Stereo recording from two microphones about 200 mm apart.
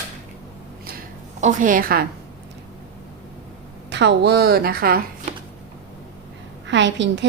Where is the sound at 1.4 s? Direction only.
40° right (ahead or behind).